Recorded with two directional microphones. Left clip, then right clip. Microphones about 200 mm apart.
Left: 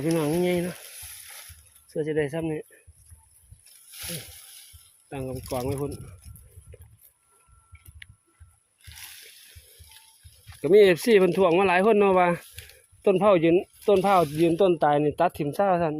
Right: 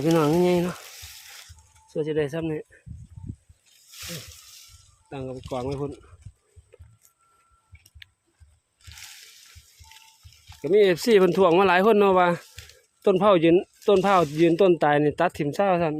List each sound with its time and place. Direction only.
0.2 s speech: 20° right (ahead or behind)
1.9 s speech: 10° right (ahead or behind)
5.0 s speech: 5° left (ahead or behind)
6.7 s a sound: 5° left (ahead or behind)
8.8 s a sound: centre (ahead or behind)
10.6 s speech: 15° left (ahead or behind)
10.8 s speech: centre (ahead or behind)